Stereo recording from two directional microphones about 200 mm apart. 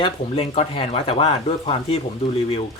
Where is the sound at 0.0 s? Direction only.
30° left (ahead or behind).